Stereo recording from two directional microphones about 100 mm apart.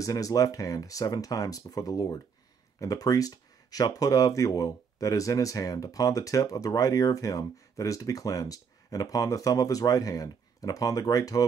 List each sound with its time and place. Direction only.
0.0 s speech: 35° left (ahead or behind)